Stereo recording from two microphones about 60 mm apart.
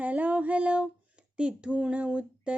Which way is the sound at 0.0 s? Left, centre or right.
Right.